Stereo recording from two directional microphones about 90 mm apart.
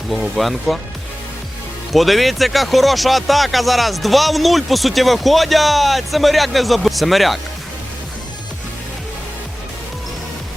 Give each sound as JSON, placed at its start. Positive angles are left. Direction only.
{"t": 0.1, "sound": "speech", "side_deg": 0}
{"t": 1.9, "sound": "speech", "side_deg": 0}